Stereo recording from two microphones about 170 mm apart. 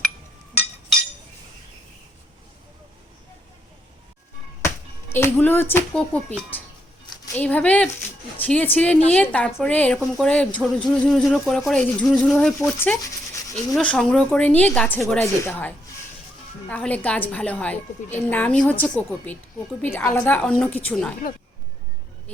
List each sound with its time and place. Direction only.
4.6 s a sound: 15° left (ahead or behind)
5.9 s speech: 5° left (ahead or behind)
13.0 s dog: 20° left (ahead or behind)
13.7 s speech: 5° left (ahead or behind)